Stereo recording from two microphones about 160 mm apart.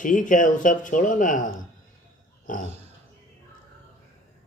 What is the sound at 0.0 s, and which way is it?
Speech, 55° left (ahead or behind).